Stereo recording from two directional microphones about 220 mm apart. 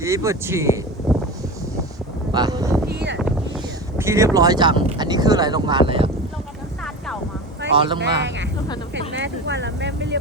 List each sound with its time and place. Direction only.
0.0 s speech: 15° right (ahead or behind)
1.1 s a sound: centre (ahead or behind)
2.3 s speech: 20° right (ahead or behind)
2.8 s a sound: 50° right (ahead or behind)
3.9 s boat: 10° right (ahead or behind)
4.4 s speech: 20° right (ahead or behind)
7.9 s speech: 50° right (ahead or behind)